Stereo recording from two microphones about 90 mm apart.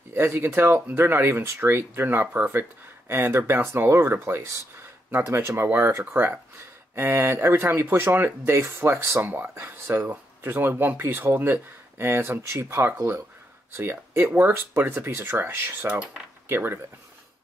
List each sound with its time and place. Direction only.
0.1 s speech: 25° right (ahead or behind)
15.9 s speech: 10° right (ahead or behind)
16.4 s speech: 25° right (ahead or behind)